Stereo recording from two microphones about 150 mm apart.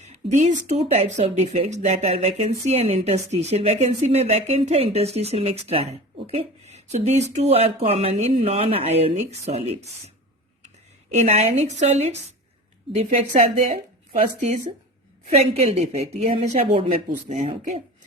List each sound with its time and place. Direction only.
0.0 s speech: 50° right (ahead or behind)
11.1 s speech: 45° right (ahead or behind)
15.3 s speech: 45° right (ahead or behind)